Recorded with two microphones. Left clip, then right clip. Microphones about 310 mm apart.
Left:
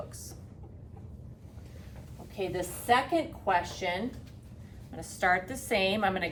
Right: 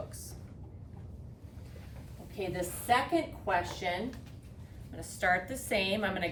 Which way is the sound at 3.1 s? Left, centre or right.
Centre.